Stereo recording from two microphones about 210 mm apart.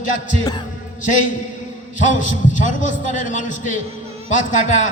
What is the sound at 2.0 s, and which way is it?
A man's voice, 35° left (ahead or behind).